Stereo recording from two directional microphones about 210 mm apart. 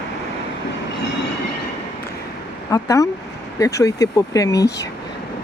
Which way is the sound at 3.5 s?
15° left (ahead or behind).